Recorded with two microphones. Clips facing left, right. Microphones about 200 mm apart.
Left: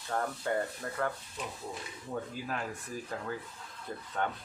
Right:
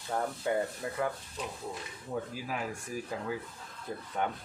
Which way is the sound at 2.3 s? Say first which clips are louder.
Right 1 dB; 10° right (ahead or behind).